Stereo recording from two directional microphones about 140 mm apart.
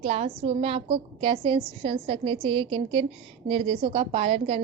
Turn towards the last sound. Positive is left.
turn(degrees=-45)  # may be behind; listen again after turning